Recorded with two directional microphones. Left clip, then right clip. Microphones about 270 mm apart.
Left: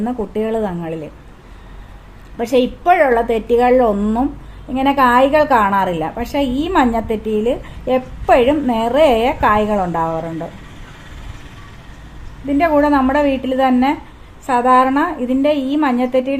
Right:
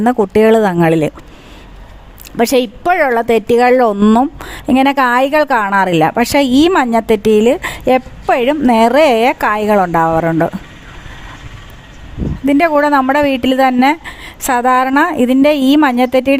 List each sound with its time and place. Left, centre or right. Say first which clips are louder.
0.0 s a woman's voice: right 11 dB; right
2.4 s a woman's voice: right 3 dB; right
12.5 s a woman's voice: right 3 dB; right